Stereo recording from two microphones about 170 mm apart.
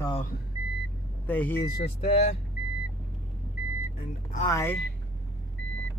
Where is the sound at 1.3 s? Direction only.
10° left (ahead or behind).